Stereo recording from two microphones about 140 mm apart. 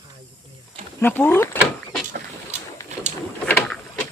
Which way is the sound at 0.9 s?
15° left (ahead or behind).